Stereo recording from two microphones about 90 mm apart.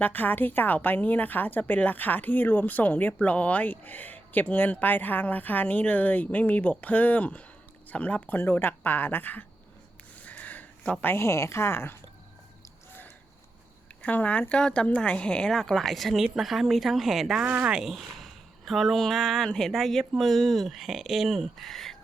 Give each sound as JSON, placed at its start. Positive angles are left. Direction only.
{"t": 0.0, "sound": "speech", "side_deg": 20}
{"t": 10.2, "sound": "a sound", "side_deg": 15}
{"t": 11.0, "sound": "speech", "side_deg": 30}
{"t": 14.0, "sound": "speech", "side_deg": 15}
{"t": 17.4, "sound": "speech", "side_deg": -20}
{"t": 17.7, "sound": "speech", "side_deg": -5}